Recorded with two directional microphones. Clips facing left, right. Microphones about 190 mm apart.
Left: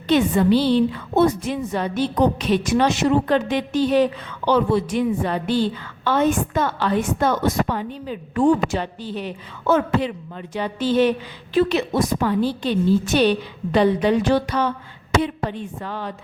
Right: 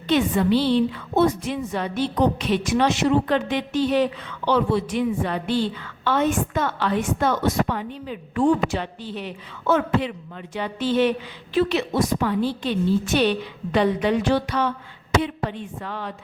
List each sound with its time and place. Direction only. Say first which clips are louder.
0.1 s a woman's voice: left 3 dB; 40° left (ahead or behind)